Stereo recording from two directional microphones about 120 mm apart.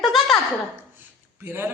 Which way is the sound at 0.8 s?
15° right (ahead or behind).